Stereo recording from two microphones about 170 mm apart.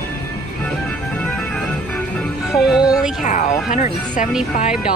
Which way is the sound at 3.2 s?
50° left (ahead or behind).